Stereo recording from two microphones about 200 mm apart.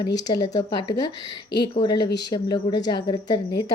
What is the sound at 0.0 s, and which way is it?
A woman's voice, 20° left (ahead or behind).